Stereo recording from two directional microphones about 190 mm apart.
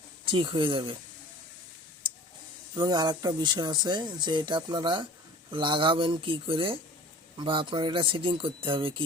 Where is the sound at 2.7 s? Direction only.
20° right (ahead or behind).